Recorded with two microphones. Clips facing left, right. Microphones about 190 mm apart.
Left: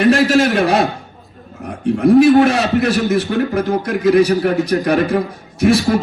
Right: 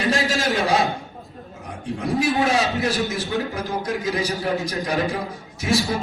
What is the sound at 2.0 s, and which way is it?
A man's voice, 65° left (ahead or behind).